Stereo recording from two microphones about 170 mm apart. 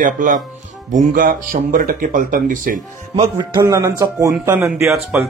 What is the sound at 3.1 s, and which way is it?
Music, 30° right (ahead or behind).